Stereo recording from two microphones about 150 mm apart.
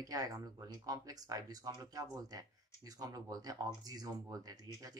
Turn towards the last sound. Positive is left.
turn(degrees=-25)  # may be behind; listen again after turning